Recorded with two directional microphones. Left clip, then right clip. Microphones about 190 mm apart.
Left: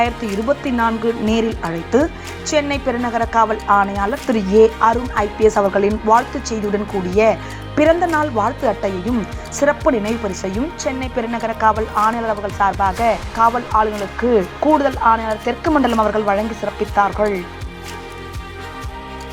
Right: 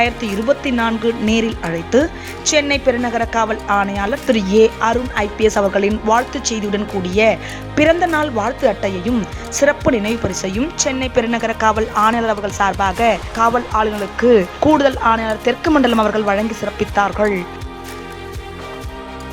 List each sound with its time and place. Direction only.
0.0 s speech: 25° right (ahead or behind)
3.8 s speech: 40° right (ahead or behind)
4.4 s speech: 25° right (ahead or behind)
9.1 s speech: centre (ahead or behind)
9.6 s speech: 25° right (ahead or behind)